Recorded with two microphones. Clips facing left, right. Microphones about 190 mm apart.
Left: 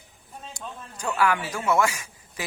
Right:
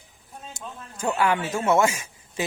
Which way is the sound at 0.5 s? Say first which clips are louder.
Left 1 dB; 25° right (ahead or behind).